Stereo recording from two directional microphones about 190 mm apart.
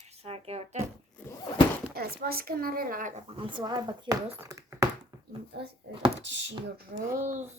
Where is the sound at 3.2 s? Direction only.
25° right (ahead or behind).